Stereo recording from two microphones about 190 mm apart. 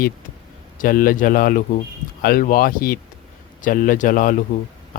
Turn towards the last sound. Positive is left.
turn(degrees=45)  # may be behind; listen again after turning